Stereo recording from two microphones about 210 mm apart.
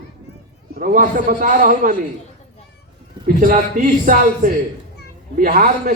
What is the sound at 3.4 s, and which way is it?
A man's voice, 40° right (ahead or behind).